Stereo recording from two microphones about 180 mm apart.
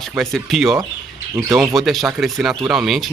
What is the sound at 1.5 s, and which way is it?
Speech, 20° right (ahead or behind).